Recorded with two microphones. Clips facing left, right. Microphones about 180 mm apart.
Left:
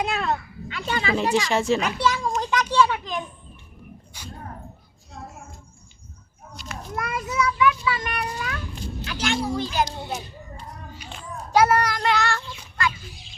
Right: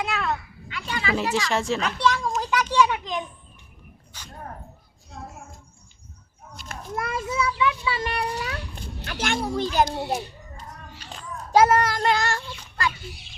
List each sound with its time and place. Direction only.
0.0 s a sound: 20° left (ahead or behind)
1.2 s speech: 20° left (ahead or behind)
1.5 s a child's voice: centre (ahead or behind)
2.7 s children playing: 15° right (ahead or behind)
4.1 s dog: 10° left (ahead or behind)
5.1 s a sound: centre (ahead or behind)
6.6 s children playing: 55° right (ahead or behind)
6.9 s children playing: 25° right (ahead or behind)
7.6 s a sound: 25° right (ahead or behind)
8.7 s children playing: 55° right (ahead or behind)
11.5 s child singing: 25° right (ahead or behind)
12.1 s child singing: 45° right (ahead or behind)